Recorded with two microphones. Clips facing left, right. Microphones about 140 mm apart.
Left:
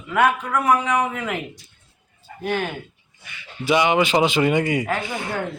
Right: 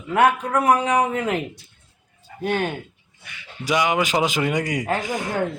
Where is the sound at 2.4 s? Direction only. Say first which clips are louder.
Right 1 dB; 35° right (ahead or behind).